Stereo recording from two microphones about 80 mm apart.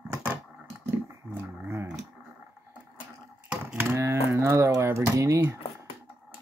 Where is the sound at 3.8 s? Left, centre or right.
Right.